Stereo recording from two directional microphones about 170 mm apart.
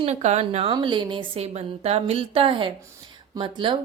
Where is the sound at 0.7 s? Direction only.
25° right (ahead or behind).